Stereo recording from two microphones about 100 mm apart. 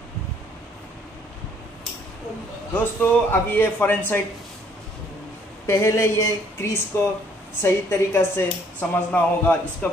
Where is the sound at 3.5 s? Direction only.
20° left (ahead or behind).